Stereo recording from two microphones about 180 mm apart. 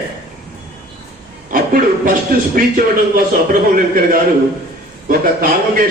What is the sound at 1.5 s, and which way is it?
Chuckle, 55° right (ahead or behind).